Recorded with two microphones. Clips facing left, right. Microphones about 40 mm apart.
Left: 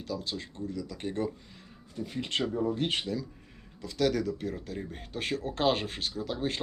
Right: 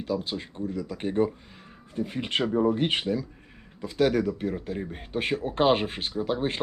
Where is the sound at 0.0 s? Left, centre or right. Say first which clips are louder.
Right 6 dB; right.